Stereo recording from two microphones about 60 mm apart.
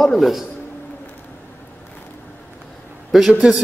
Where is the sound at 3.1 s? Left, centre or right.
Centre.